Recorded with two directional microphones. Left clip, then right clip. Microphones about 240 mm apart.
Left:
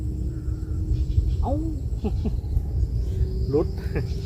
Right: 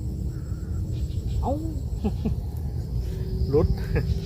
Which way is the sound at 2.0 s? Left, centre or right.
Centre.